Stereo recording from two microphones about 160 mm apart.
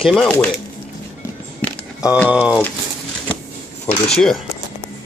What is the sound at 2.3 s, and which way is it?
Speech, 10° right (ahead or behind).